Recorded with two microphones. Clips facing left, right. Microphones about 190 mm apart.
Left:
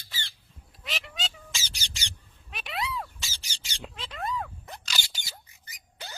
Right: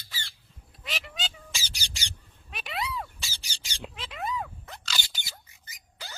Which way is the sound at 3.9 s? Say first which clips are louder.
Even; centre (ahead or behind).